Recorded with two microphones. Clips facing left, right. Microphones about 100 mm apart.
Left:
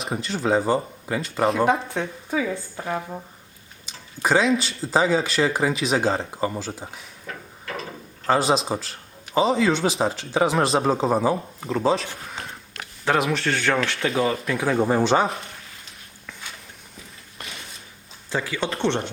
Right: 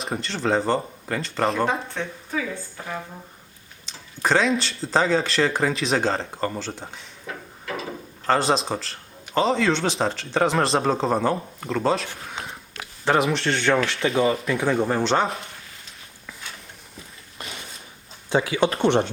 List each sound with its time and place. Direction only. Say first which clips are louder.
0.0 s speech: left 1 dB; 5° left (ahead or behind)
2.8 s speech: left 5 dB; 30° left (ahead or behind)
3.8 s speech: even; 5° left (ahead or behind)
8.3 s speech: left 1 dB; 5° left (ahead or behind)
18.3 s speech: right 5 dB; 15° right (ahead or behind)